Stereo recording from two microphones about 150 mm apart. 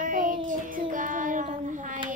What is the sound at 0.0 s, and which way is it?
Child singing, 60° right (ahead or behind).